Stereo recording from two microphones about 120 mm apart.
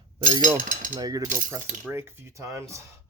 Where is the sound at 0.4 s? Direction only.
90° right.